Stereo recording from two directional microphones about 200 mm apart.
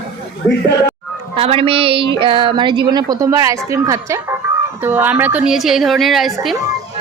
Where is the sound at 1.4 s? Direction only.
30° right (ahead or behind); by 6.6 s centre (ahead or behind).